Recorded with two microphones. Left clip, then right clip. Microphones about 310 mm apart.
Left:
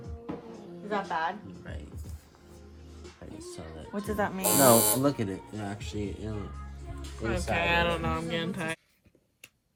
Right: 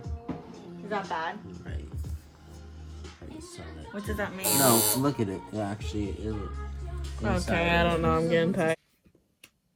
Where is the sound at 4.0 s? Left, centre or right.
Centre.